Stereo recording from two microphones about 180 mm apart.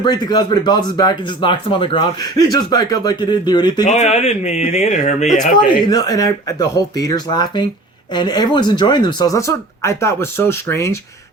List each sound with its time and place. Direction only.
0.0 s speech: 25° left (ahead or behind)
3.8 s speech: 40° left (ahead or behind)
5.5 s speech: 25° left (ahead or behind)